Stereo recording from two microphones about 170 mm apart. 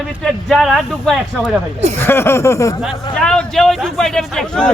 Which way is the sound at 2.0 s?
15° left (ahead or behind).